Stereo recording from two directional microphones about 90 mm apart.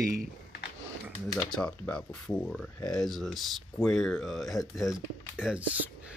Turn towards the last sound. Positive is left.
turn(degrees=-15)  # may be behind; listen again after turning